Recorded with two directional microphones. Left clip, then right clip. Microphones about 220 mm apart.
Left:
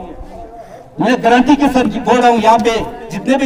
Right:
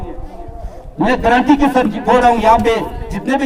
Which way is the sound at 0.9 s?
55° left (ahead or behind).